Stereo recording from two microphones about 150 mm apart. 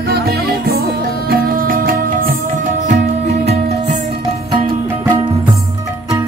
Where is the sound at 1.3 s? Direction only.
75° right (ahead or behind).